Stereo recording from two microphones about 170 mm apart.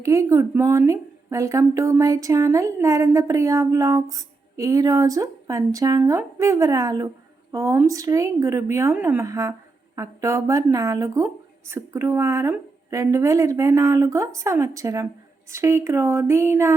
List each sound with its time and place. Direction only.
0.0 s a woman's voice: 20° right (ahead or behind)